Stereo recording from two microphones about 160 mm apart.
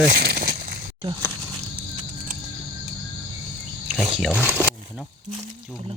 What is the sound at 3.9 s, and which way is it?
Speech, centre (ahead or behind).